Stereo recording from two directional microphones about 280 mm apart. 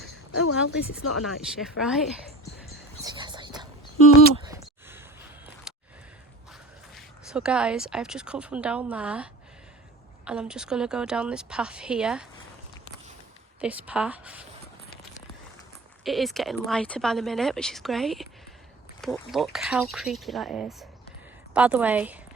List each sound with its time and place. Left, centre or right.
0.7 s speech: left
1.2 s speech: centre
3.0 s whispering: centre
4.4 s a sound: centre
6.9 s speech: centre
13.6 s speech: centre
16.0 s speech: centre